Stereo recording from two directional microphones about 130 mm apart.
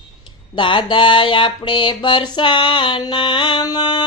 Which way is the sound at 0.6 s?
40° left (ahead or behind).